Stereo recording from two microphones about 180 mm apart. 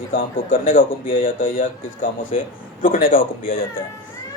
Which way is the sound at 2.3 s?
35° left (ahead or behind).